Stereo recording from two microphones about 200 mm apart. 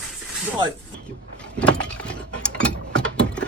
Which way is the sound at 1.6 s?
5° left (ahead or behind).